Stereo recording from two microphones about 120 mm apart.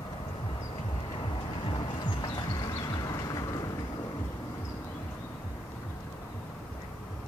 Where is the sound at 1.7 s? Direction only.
45° left (ahead or behind).